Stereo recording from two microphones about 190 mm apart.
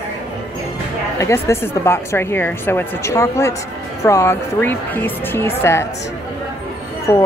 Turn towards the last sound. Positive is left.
turn(degrees=15)  # may be behind; listen again after turning